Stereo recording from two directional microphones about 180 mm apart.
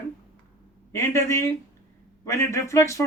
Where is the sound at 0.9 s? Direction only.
15° left (ahead or behind).